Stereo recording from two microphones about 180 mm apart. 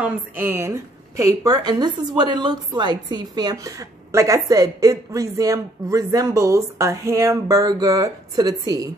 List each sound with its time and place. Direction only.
0.0 s a woman's voice: 10° right (ahead or behind)